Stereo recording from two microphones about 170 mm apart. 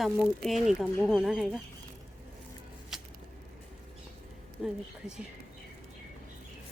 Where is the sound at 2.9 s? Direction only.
Centre (ahead or behind).